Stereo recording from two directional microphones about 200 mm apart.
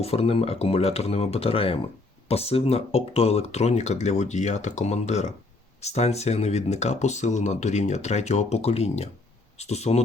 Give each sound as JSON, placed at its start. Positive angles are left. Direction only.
{"t": 0.0, "sound": "speech", "side_deg": 30}